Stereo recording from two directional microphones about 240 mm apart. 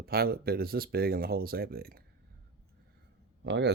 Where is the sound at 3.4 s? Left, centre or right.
Right.